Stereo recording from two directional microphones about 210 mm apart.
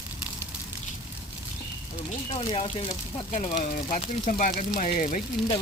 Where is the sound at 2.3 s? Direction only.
25° left (ahead or behind).